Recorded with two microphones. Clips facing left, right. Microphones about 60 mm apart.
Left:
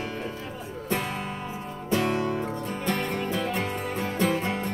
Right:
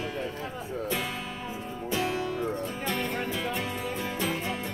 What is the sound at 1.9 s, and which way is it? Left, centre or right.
Music, left.